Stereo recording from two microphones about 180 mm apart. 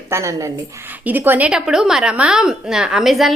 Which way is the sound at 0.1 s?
15° right (ahead or behind).